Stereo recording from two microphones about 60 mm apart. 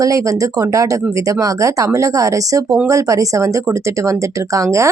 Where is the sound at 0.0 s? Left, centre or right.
Right.